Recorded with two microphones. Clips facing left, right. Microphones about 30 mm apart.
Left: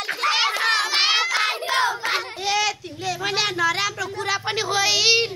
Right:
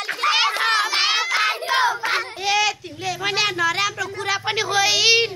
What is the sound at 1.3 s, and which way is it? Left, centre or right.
Crowd, right.